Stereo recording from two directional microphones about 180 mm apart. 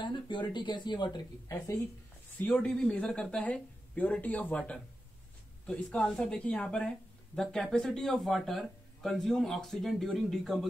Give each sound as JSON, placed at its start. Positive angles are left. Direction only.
{"t": 0.0, "sound": "speech", "side_deg": 25}
{"t": 2.3, "sound": "speech", "side_deg": 5}